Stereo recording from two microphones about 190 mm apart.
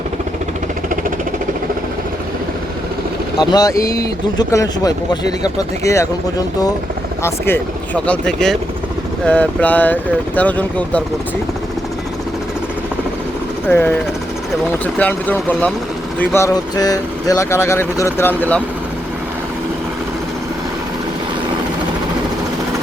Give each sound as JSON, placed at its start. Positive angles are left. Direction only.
{"t": 3.3, "sound": "speech", "side_deg": 20}
{"t": 7.2, "sound": "speech", "side_deg": 15}
{"t": 13.7, "sound": "speech", "side_deg": 10}
{"t": 14.9, "sound": "speech", "side_deg": 10}